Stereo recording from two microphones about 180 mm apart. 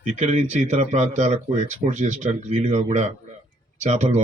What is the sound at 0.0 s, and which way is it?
Speech, 40° right (ahead or behind).